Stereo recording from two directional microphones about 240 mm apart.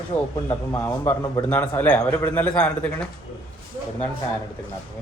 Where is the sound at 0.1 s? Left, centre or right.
Centre.